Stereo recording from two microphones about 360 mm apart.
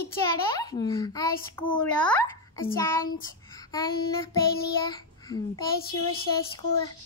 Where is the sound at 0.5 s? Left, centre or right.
Centre.